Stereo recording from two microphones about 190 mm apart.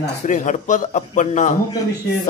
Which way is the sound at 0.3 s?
40° left (ahead or behind).